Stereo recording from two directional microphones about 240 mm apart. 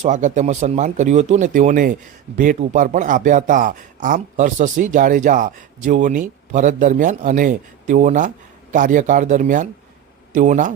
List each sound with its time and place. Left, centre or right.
0.0 s speech: right